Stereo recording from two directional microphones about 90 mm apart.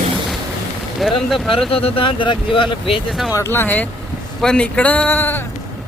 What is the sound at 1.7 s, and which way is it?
Speech, 90° left.